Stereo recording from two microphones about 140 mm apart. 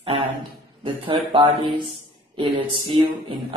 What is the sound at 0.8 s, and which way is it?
Speech, 40° right (ahead or behind).